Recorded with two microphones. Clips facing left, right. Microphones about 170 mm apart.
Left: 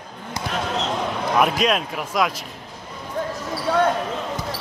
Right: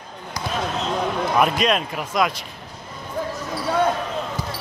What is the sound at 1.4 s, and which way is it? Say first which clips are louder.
Speech: left 1 dB; centre (ahead or behind).